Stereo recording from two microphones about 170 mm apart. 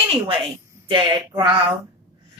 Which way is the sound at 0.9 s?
30° right (ahead or behind).